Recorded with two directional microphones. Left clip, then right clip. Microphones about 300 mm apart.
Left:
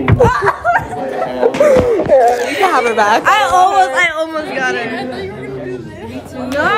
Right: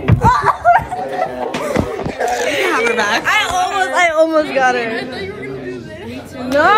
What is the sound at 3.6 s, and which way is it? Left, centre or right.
Speech, centre.